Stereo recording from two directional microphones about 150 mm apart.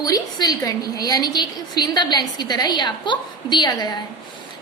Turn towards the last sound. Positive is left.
turn(degrees=25)  # may be behind; listen again after turning